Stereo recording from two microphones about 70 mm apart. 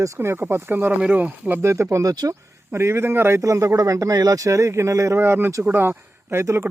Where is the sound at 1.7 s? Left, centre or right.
Right.